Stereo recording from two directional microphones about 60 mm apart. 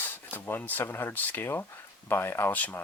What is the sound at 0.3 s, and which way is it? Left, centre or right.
Speech, left.